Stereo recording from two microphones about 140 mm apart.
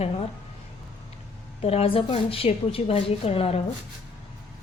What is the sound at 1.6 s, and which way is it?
A woman's voice, 45° left (ahead or behind).